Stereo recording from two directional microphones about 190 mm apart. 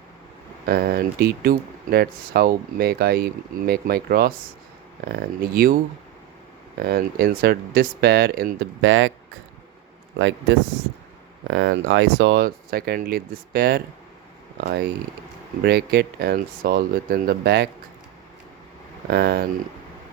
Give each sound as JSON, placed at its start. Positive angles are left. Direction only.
{"t": 0.6, "sound": "speech", "side_deg": -55}
{"t": 6.8, "sound": "speech", "side_deg": -55}
{"t": 8.8, "sound": "speech", "side_deg": -90}
{"t": 10.2, "sound": "speech", "side_deg": -90}
{"t": 11.4, "sound": "speech", "side_deg": -75}
{"t": 19.0, "sound": "speech", "side_deg": -55}